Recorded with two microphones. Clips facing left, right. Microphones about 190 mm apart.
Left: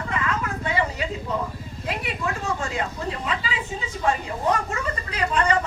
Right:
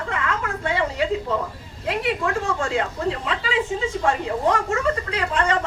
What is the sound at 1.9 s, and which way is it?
A woman's voice, 60° right (ahead or behind).